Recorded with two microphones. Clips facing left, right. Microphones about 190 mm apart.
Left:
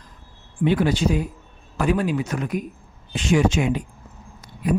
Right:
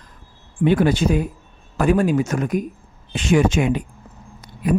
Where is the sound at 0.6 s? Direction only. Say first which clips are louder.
Right 3 dB; 50° right (ahead or behind).